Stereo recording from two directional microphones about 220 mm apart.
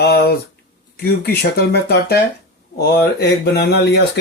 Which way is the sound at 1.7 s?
45° left (ahead or behind).